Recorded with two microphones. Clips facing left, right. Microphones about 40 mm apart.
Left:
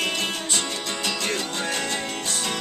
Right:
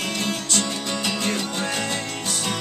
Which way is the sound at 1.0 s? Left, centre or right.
Centre.